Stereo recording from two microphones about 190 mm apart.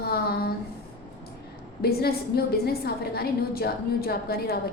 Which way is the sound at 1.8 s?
55° left (ahead or behind).